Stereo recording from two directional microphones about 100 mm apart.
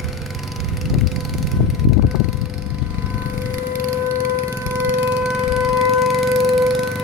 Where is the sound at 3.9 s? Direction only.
25° right (ahead or behind).